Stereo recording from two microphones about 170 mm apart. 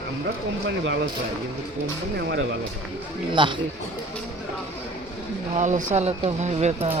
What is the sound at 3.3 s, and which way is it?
Speech, 30° right (ahead or behind).